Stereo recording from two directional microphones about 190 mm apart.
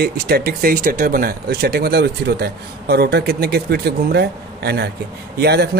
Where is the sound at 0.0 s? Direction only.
55° right (ahead or behind).